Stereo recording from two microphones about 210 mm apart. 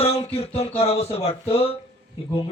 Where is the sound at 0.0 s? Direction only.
30° left (ahead or behind).